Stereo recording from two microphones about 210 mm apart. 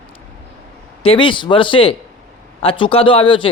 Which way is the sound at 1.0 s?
25° left (ahead or behind).